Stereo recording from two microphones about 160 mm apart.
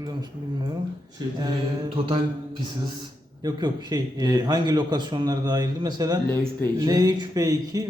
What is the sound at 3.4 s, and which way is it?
Speech, 25° right (ahead or behind).